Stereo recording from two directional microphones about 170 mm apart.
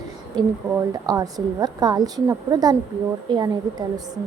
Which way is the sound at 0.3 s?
20° right (ahead or behind).